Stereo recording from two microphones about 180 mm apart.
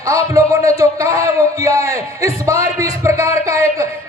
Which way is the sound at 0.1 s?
15° right (ahead or behind).